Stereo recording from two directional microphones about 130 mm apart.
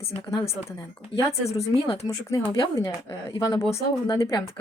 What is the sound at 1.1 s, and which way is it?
Speech, 45° left (ahead or behind).